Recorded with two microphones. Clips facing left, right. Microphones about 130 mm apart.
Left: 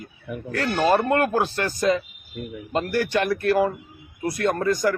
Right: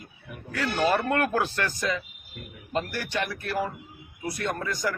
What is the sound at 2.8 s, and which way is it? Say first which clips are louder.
Speech: left 7 dB; 55° left (ahead or behind).